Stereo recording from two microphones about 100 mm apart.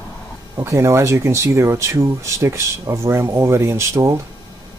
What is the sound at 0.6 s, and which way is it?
Speech, 30° right (ahead or behind).